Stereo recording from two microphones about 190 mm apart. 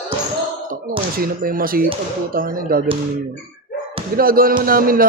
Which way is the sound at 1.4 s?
50° right (ahead or behind).